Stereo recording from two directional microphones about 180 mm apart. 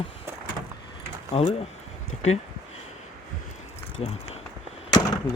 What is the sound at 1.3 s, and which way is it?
Speech, 30° left (ahead or behind).